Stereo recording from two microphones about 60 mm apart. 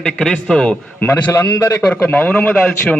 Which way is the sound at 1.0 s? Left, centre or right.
Left.